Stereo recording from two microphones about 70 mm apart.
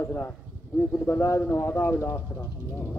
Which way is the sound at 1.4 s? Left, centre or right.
Left.